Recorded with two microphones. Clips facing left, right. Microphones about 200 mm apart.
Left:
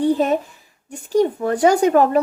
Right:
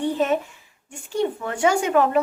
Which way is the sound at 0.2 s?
35° left (ahead or behind).